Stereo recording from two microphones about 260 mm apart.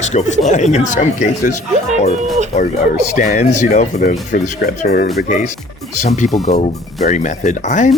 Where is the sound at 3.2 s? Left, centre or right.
Left.